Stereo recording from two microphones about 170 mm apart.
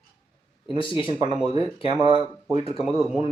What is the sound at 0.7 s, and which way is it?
Speech, 30° left (ahead or behind).